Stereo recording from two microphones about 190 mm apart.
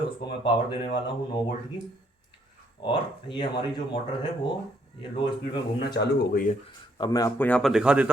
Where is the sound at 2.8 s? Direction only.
25° left (ahead or behind).